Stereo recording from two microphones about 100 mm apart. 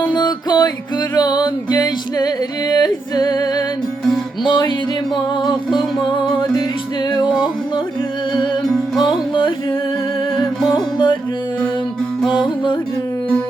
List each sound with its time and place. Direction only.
0.2 s music: 45° left (ahead or behind)
9.0 s music: 50° left (ahead or behind)
10.4 s music: centre (ahead or behind)
10.9 s music: 55° left (ahead or behind)